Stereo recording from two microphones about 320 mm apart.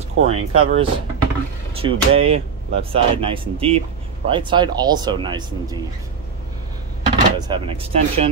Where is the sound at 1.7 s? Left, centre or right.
Centre.